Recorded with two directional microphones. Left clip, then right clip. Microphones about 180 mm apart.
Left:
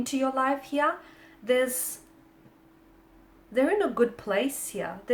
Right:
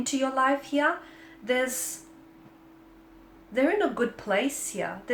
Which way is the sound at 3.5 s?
40° left (ahead or behind).